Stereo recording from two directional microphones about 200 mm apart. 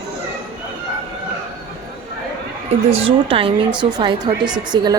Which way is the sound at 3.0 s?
25° right (ahead or behind).